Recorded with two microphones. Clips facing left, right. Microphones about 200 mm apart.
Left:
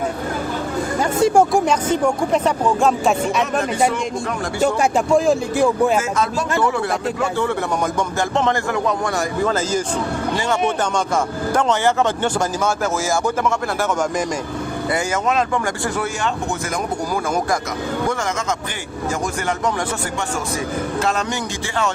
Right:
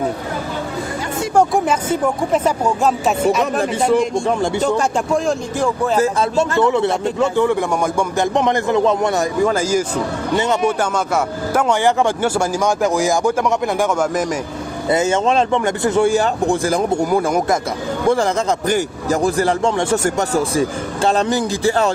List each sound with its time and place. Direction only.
1.4 s speech: centre (ahead or behind)
4.6 s speech: 5° left (ahead or behind)
6.0 s a man's voice: 30° right (ahead or behind); by 9.8 s 10° right (ahead or behind)
11.5 s speech: 15° right (ahead or behind)
14.8 s a man's voice: 25° right (ahead or behind)